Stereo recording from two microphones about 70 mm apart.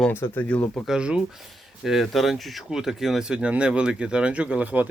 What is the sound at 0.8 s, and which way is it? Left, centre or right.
Speech, centre.